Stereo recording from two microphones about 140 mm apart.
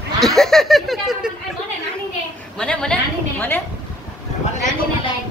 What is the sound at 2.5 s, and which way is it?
Laughter, 5° left (ahead or behind).